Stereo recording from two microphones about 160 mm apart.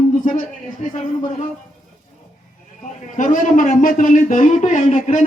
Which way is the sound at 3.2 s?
55° left (ahead or behind).